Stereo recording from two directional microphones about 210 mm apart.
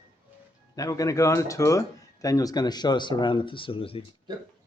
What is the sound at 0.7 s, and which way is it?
Speech, 15° left (ahead or behind).